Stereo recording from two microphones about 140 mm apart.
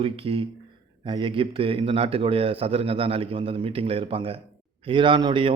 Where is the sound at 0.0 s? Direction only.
40° right (ahead or behind).